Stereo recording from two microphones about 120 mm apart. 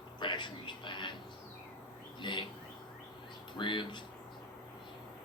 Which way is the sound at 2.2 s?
40° left (ahead or behind).